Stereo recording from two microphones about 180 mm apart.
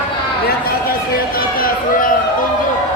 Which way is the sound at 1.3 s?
55° left (ahead or behind).